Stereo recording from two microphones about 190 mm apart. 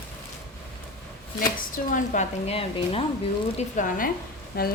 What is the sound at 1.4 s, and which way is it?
A woman's voice, 45° left (ahead or behind).